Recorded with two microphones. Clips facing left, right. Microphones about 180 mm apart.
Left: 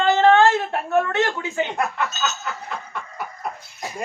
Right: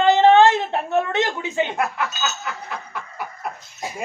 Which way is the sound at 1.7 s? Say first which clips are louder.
Even; 5° right (ahead or behind).